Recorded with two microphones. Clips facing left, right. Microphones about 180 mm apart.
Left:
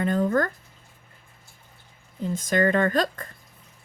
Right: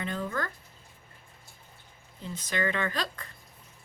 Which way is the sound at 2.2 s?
45° left (ahead or behind).